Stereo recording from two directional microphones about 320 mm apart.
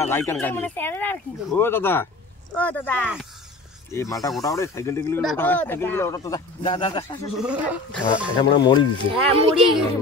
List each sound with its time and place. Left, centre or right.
0.1 s speech: centre
7.3 s speech: centre
8.4 s speech: centre
9.1 s speech: centre